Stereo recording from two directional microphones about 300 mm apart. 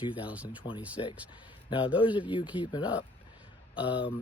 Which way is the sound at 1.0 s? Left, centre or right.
Centre.